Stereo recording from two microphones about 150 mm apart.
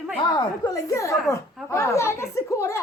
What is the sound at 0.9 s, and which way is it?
Speech, 20° left (ahead or behind).